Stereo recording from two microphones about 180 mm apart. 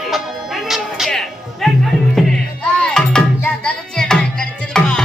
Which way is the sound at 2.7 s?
5° left (ahead or behind).